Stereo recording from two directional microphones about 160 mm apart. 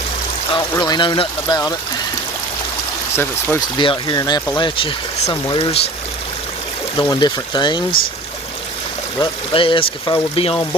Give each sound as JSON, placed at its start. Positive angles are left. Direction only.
{"t": 0.8, "sound": "speech", "side_deg": 30}
{"t": 3.2, "sound": "speech", "side_deg": 15}
{"t": 3.8, "sound": "speech", "side_deg": 30}
{"t": 6.9, "sound": "speech", "side_deg": 30}
{"t": 9.2, "sound": "speech", "side_deg": 35}